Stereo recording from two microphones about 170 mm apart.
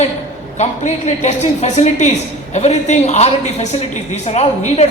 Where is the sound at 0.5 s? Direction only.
45° left (ahead or behind).